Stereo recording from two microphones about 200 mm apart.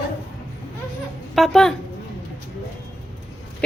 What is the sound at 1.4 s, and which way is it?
Speech, centre (ahead or behind).